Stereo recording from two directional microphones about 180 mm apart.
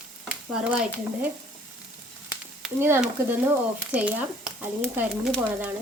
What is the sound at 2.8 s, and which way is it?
Speech, 10° right (ahead or behind).